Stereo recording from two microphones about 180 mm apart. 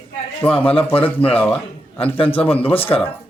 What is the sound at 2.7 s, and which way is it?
Speech, 30° left (ahead or behind).